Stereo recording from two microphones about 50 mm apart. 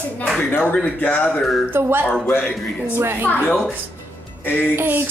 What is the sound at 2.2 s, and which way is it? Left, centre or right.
Speech, left.